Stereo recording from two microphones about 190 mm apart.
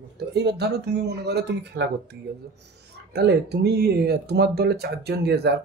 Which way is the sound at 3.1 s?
60° right (ahead or behind).